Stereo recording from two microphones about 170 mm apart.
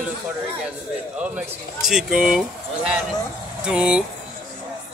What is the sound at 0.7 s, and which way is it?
Speech, 10° right (ahead or behind).